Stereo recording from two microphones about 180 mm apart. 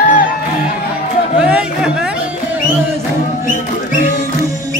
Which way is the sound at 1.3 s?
5° right (ahead or behind).